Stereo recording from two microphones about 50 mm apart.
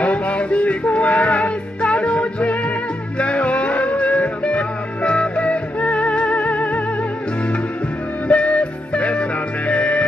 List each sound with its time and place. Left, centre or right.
0.0 s music: left
8.3 s music: left